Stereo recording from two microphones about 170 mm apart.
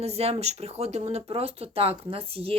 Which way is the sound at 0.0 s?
35° right (ahead or behind).